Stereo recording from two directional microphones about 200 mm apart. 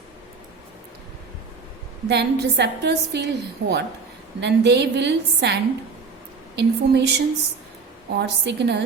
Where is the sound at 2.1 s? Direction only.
55° right (ahead or behind).